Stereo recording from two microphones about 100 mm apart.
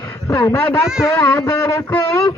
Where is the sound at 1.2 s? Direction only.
25° left (ahead or behind).